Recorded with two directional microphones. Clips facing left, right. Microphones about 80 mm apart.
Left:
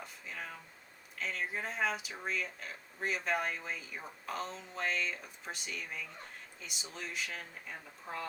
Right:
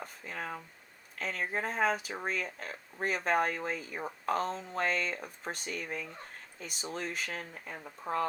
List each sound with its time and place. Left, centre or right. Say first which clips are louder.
0.0 s speech: right 5 dB; right